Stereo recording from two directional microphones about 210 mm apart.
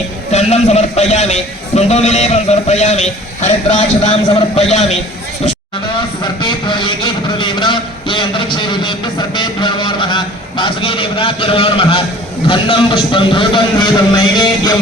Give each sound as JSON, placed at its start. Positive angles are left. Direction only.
{"t": 0.3, "sound": "a man's voice", "side_deg": 30}
{"t": 6.2, "sound": "a sound", "side_deg": 20}
{"t": 12.5, "sound": "a man's voice", "side_deg": 25}